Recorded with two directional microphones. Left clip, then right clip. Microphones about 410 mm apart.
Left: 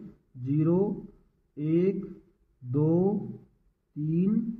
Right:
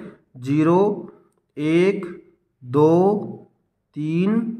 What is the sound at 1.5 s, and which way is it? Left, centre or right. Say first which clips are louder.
A man's voice: right 9 dB; centre.